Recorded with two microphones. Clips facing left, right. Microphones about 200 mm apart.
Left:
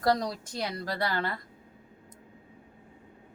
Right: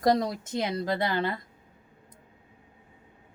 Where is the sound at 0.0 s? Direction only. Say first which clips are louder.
Right 3 dB; 20° right (ahead or behind).